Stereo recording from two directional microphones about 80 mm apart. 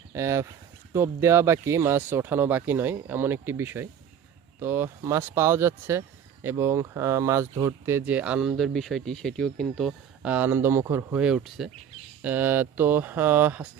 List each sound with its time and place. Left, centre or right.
0.1 s speech: right
8.0 s speech: centre
9.6 s speech: centre
10.2 s speech: right
11.1 s speech: centre
12.2 s speech: right